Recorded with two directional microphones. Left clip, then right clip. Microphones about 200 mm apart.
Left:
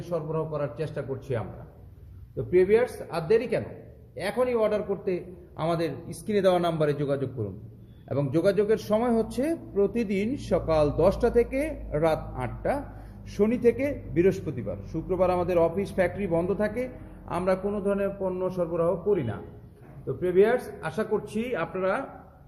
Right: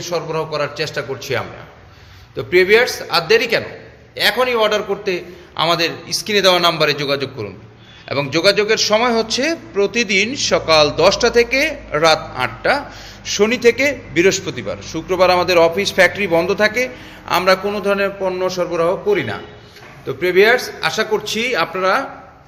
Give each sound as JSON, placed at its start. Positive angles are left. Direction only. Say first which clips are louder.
{"t": 0.1, "sound": "a man's voice", "louder": "right 9 dB", "side_deg": -5}